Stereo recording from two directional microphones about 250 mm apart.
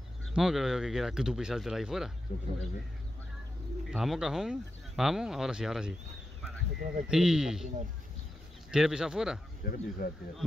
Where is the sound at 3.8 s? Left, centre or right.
Centre.